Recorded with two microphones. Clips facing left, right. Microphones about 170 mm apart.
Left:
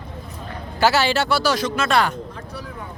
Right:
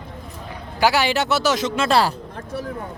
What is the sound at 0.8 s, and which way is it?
Speech, 15° right (ahead or behind).